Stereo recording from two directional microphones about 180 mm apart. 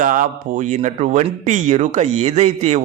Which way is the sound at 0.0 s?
50° right (ahead or behind).